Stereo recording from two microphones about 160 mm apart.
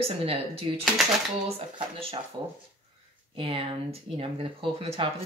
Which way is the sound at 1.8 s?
35° right (ahead or behind).